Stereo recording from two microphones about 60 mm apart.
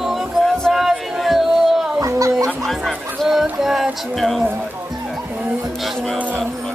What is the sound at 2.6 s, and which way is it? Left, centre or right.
Speech, centre.